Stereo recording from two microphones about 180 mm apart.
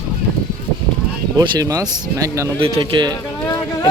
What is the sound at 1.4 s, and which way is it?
Speech, 20° right (ahead or behind).